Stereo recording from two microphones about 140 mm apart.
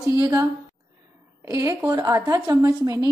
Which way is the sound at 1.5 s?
20° right (ahead or behind).